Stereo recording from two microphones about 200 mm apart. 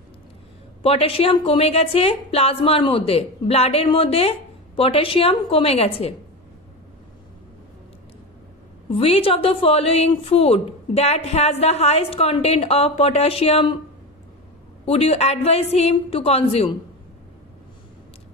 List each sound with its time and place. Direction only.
0.8 s a woman's voice: 30° left (ahead or behind)
8.9 s a woman's voice: 30° left (ahead or behind)
14.9 s a woman's voice: 30° left (ahead or behind)